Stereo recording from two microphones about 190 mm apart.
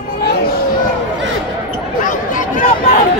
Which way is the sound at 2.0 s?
45° left (ahead or behind).